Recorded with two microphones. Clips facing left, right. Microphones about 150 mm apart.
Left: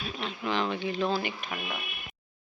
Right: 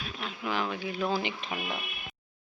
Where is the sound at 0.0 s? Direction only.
5° right (ahead or behind).